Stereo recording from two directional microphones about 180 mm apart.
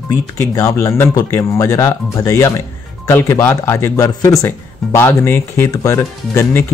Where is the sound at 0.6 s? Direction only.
15° left (ahead or behind).